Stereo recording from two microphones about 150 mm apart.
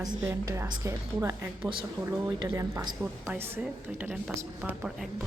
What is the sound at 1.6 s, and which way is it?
A woman's voice, 35° right (ahead or behind).